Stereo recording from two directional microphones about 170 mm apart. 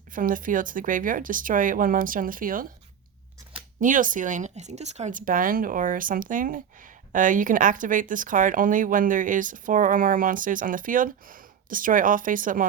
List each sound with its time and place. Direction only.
0.1 s speech: 55° right (ahead or behind)
3.8 s speech: 50° right (ahead or behind)